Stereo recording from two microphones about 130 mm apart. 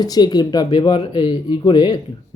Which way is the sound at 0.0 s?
30° left (ahead or behind).